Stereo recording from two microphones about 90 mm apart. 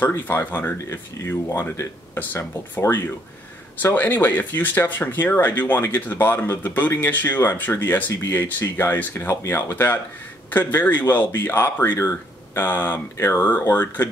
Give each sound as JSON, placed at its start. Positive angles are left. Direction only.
{"t": 0.0, "sound": "speech", "side_deg": 30}
{"t": 3.8, "sound": "speech", "side_deg": 20}
{"t": 8.1, "sound": "speech", "side_deg": 30}